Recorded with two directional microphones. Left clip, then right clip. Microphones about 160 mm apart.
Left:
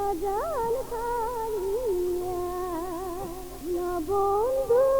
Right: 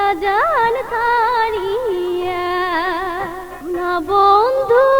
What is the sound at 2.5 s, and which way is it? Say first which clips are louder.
Music: right 14 dB; 25° left (ahead or behind).